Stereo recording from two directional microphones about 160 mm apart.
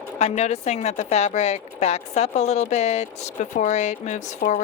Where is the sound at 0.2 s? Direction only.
45° left (ahead or behind).